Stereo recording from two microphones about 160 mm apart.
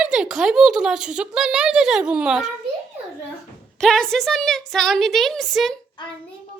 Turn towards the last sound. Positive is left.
turn(degrees=30)  # may be behind; listen again after turning